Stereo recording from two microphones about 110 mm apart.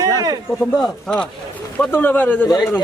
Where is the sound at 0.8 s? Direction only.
10° left (ahead or behind).